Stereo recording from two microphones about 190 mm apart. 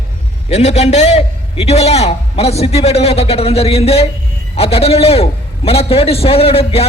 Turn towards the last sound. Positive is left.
turn(degrees=30)  # may be behind; listen again after turning